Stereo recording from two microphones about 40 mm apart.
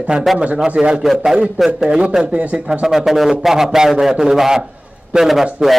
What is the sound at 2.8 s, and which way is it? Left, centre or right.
A man's voice, centre.